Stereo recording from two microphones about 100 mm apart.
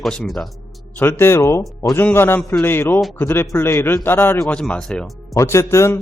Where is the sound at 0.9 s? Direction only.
25° left (ahead or behind).